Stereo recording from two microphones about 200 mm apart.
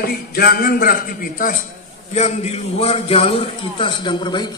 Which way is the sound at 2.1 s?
35° left (ahead or behind).